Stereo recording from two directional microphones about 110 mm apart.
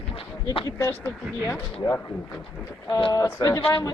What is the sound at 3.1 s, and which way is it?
Speech, 30° left (ahead or behind).